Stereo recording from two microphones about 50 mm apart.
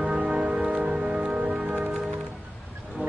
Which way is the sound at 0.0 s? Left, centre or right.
Right.